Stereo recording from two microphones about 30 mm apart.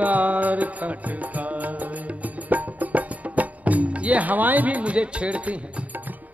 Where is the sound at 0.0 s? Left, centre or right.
Right.